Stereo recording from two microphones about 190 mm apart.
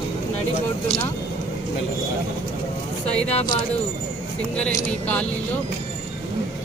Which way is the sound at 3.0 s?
5° left (ahead or behind).